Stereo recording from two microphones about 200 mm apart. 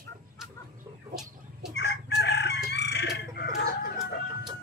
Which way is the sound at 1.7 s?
55° left (ahead or behind).